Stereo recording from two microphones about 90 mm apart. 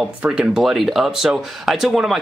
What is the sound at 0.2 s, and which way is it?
Speech, 10° right (ahead or behind).